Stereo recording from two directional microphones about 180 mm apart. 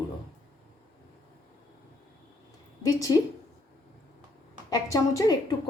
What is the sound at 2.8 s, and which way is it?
Speech, 20° left (ahead or behind).